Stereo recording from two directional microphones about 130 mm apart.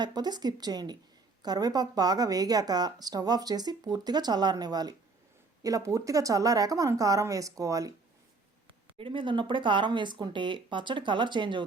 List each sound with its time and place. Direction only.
0.0 s speech: 30° right (ahead or behind)
9.0 s speech: 40° right (ahead or behind)